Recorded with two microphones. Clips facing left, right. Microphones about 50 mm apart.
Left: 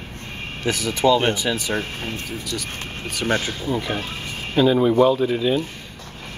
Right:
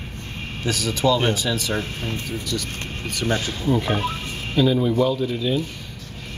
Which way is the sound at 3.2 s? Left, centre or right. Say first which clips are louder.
Left 2 dB; left.